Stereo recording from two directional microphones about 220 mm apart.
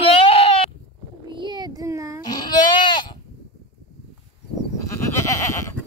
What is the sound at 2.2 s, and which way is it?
Goat, 20° left (ahead or behind).